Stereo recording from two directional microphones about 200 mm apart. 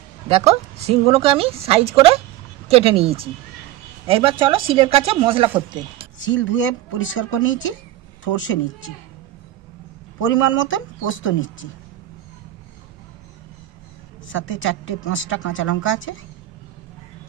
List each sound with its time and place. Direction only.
0.3 s speech: 30° right (ahead or behind)
6.1 s a woman's voice: 70° left (ahead or behind)
10.2 s a woman's voice: 75° left (ahead or behind)
14.2 s a woman's voice: 70° left (ahead or behind)